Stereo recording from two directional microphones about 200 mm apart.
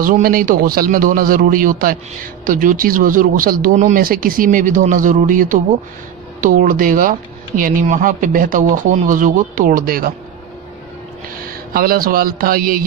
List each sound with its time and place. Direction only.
0.0 s speech: 45° right (ahead or behind)
11.3 s speech: 45° right (ahead or behind)